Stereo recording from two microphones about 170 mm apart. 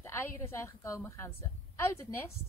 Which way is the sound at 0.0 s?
15° left (ahead or behind).